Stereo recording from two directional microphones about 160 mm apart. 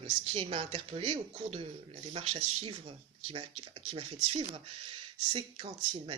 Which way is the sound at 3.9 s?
35° right (ahead or behind).